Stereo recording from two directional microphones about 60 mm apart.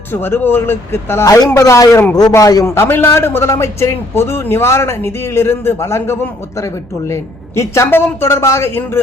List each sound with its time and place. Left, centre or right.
0.1 s speech: left
1.5 s speech: left
2.4 s a man's voice: left
2.6 s a man's voice: left
7.9 s a man's voice: left